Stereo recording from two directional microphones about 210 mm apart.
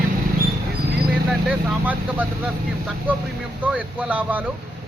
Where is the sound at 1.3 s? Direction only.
Centre (ahead or behind).